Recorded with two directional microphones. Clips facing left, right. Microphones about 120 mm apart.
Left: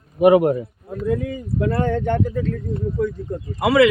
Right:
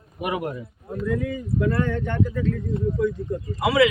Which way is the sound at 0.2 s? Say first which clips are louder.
Left 14 dB; 55° left (ahead or behind).